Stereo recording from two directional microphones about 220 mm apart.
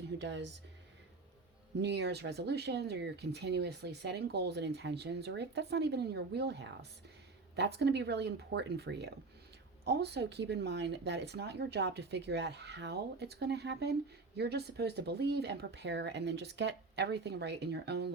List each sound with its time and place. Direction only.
0.2 s speech: 55° right (ahead or behind)
1.8 s speech: 50° right (ahead or behind)